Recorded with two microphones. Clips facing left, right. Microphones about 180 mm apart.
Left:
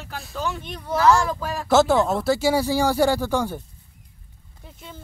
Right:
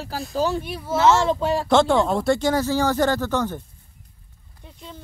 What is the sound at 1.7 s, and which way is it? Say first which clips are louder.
Speech: left 1 dB; 5° left (ahead or behind).